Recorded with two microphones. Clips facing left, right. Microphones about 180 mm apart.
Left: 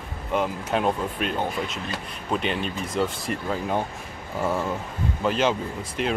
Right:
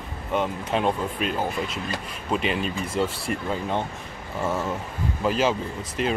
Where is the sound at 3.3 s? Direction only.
45° left (ahead or behind).